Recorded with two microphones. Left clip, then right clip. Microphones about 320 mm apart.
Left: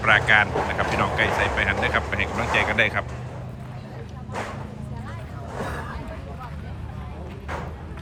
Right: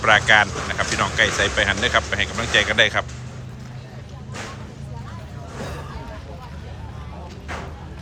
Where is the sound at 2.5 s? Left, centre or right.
Centre.